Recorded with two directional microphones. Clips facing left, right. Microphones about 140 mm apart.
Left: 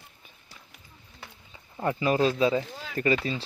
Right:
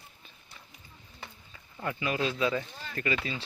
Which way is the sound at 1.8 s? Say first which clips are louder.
Left 7 dB; 35° left (ahead or behind).